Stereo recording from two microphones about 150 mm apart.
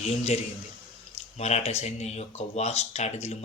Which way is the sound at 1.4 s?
45° left (ahead or behind).